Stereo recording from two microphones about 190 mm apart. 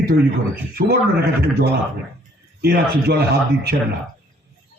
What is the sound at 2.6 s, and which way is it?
Speech, 55° right (ahead or behind).